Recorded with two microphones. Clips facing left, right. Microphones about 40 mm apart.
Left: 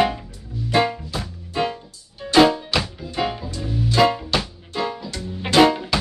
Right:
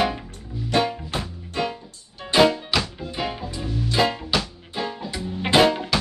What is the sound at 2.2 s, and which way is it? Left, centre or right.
Music, right.